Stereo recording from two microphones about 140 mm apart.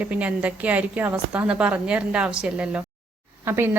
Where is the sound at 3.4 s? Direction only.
15° right (ahead or behind).